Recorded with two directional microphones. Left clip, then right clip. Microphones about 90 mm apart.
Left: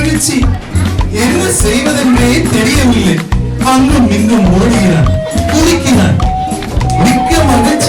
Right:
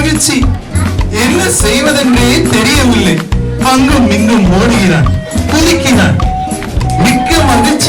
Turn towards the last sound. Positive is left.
turn(degrees=-20)  # may be behind; listen again after turning